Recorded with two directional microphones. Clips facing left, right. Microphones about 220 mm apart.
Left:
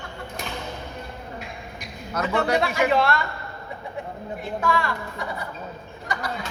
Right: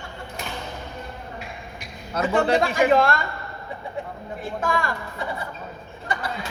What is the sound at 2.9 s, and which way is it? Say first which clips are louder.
Speech: right 4 dB; 45° right (ahead or behind).